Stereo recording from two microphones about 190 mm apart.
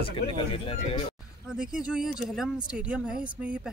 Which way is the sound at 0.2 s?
55° left (ahead or behind).